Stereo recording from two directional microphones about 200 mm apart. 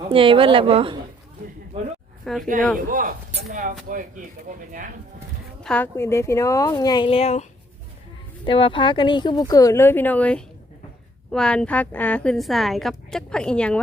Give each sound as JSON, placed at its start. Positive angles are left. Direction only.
{"t": 0.1, "sound": "speech", "side_deg": -25}
{"t": 2.3, "sound": "a woman's voice", "side_deg": 0}
{"t": 2.7, "sound": "speech", "side_deg": -45}
{"t": 5.6, "sound": "a woman's voice", "side_deg": 10}
{"t": 8.4, "sound": "a woman's voice", "side_deg": 25}